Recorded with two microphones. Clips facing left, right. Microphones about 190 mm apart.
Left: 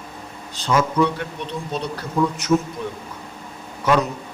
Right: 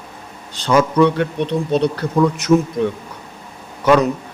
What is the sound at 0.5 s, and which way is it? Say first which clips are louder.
Speech: right 5 dB; 70° right (ahead or behind).